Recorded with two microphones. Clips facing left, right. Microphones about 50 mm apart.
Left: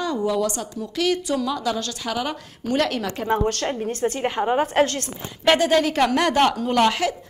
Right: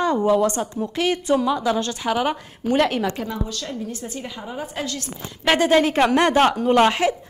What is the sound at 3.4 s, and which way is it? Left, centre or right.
A woman's voice, left.